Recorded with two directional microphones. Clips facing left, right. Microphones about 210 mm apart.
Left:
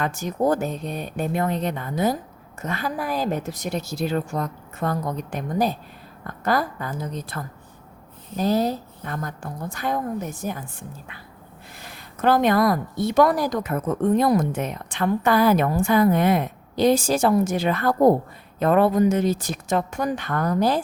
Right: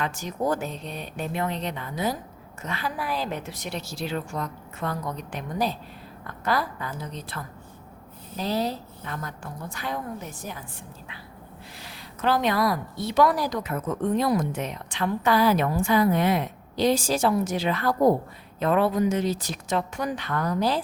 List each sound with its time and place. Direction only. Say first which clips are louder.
0.0 s a woman's voice: left 5 dB; 50° left (ahead or behind)
11.8 s a woman's voice: left 5 dB; 50° left (ahead or behind)